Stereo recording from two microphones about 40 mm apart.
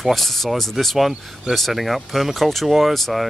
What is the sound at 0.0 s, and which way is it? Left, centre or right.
Speech, centre.